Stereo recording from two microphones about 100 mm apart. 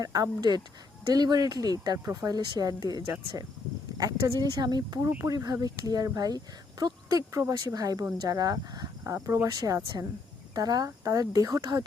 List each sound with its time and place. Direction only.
0.0 s speech: 35° right (ahead or behind)